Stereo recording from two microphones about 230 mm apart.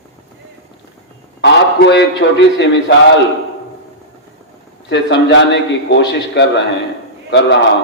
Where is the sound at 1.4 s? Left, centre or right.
Left.